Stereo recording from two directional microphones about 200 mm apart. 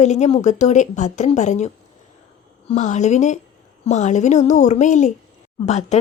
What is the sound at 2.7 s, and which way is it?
A woman's voice, 35° left (ahead or behind).